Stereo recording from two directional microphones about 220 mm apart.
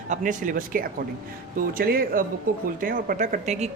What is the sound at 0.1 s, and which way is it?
Speech, 35° right (ahead or behind).